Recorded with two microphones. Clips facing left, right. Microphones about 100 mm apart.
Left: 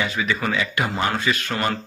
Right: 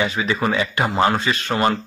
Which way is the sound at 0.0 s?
25° right (ahead or behind).